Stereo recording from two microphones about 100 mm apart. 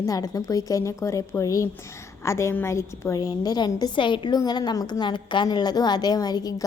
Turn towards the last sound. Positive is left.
turn(degrees=40)  # may be behind; listen again after turning